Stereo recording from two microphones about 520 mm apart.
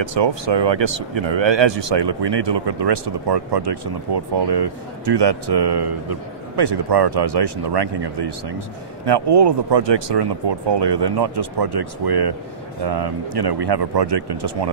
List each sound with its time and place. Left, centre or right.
0.0 s speech: right